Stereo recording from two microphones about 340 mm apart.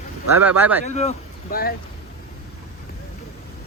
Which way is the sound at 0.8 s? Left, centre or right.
Centre.